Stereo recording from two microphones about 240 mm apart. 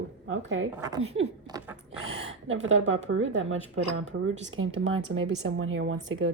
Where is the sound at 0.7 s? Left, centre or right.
Centre.